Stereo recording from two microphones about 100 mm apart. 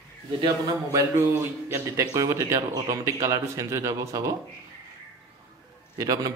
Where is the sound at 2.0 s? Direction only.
35° right (ahead or behind).